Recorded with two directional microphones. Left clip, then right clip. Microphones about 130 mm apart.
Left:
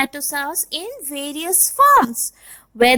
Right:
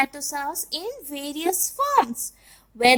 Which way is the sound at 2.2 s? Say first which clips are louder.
Left 7 dB; 40° left (ahead or behind).